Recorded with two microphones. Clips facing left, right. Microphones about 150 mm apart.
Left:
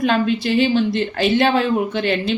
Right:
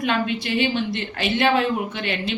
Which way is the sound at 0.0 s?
35° left (ahead or behind).